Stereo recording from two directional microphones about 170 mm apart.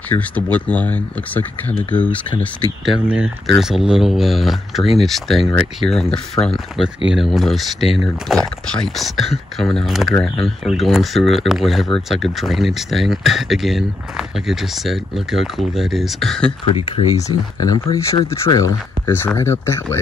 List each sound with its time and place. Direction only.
0.1 s speech: 10° left (ahead or behind)
2.8 s speech: 5° right (ahead or behind)
16.7 s speech: 30° left (ahead or behind)
18.3 s speech: 15° left (ahead or behind)